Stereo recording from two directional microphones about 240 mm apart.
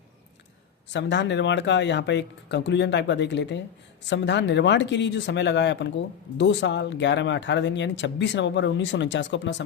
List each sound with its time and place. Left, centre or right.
0.9 s speech: left